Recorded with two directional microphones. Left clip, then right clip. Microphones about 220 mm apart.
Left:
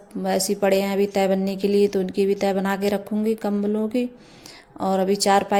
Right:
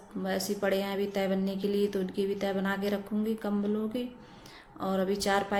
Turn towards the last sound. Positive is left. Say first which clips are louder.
# left 10 dB
turn(degrees=35)  # may be behind; listen again after turning